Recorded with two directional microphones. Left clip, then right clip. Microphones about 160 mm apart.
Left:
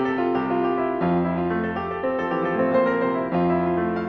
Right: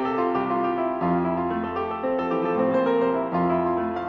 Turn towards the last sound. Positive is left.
turn(degrees=0)  # may be behind; listen again after turning